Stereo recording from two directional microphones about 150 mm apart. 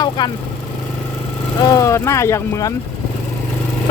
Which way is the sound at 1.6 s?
20° left (ahead or behind).